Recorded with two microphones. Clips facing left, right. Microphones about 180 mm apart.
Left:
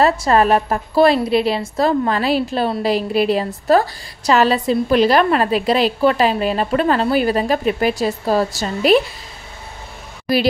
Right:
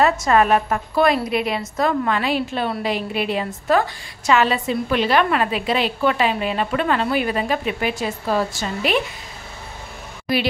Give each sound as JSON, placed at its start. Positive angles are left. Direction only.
{"t": 0.0, "sound": "a woman's voice", "side_deg": 35}
{"t": 10.2, "sound": "speech", "side_deg": 35}